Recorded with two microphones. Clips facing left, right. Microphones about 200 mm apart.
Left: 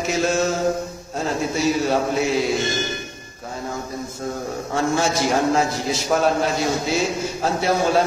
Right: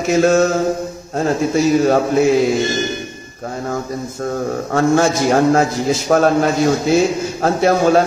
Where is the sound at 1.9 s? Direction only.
50° right (ahead or behind).